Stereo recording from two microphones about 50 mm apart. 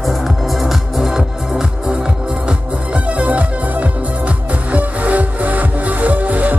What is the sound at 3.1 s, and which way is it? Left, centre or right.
Music, right.